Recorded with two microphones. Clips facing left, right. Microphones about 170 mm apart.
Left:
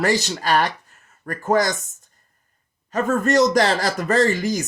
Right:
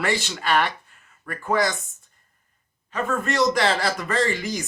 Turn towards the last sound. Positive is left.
turn(degrees=45)  # may be behind; listen again after turning